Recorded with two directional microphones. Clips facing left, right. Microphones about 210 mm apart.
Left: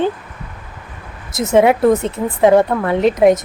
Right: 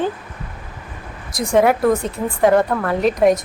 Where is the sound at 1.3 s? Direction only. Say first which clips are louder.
Left 3 dB; 20° left (ahead or behind).